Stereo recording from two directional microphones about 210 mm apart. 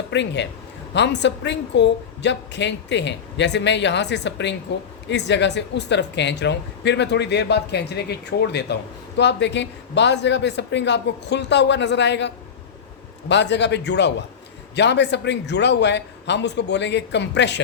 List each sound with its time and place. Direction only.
0.1 s speech: 55° left (ahead or behind)